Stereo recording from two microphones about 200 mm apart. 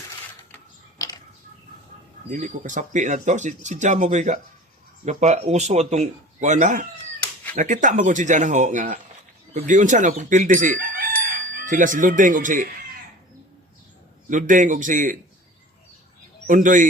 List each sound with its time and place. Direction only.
0.5 s mechanisms: 20° left (ahead or behind)
2.3 s speech: 40° right (ahead or behind)
14.3 s speech: 40° right (ahead or behind)
16.5 s speech: 40° right (ahead or behind)